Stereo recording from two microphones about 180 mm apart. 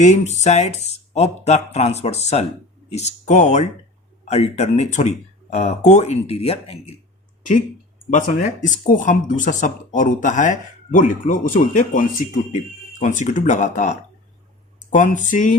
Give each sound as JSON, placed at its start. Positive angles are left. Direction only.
{"t": 0.0, "sound": "speech", "side_deg": 40}
{"t": 8.1, "sound": "speech", "side_deg": 45}